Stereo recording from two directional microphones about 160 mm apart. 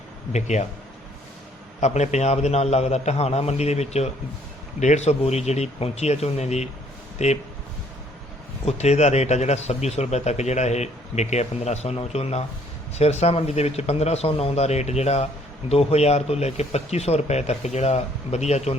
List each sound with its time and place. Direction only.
0.3 s speech: 45° left (ahead or behind)
1.8 s speech: 45° left (ahead or behind)
8.6 s speech: 45° left (ahead or behind)